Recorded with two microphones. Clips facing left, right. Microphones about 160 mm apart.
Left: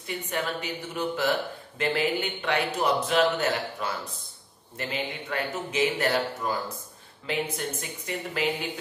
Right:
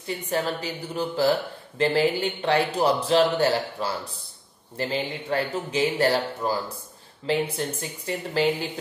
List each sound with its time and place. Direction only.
0.3 s a man's voice: 35° right (ahead or behind)